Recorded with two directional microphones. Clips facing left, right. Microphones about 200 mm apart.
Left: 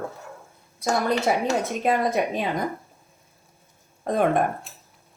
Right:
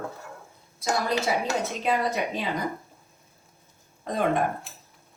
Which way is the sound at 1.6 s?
50° left (ahead or behind).